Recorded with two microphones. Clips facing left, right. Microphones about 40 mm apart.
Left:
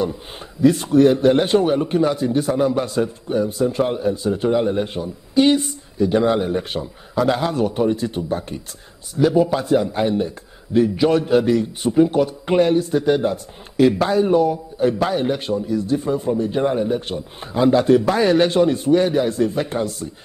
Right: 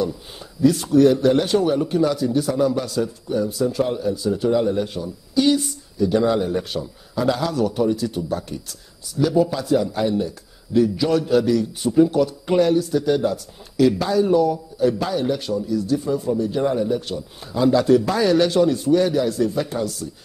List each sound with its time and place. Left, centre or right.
0.6 s a man's voice: left